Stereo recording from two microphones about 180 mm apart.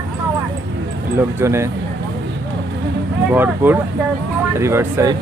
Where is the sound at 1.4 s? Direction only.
15° right (ahead or behind).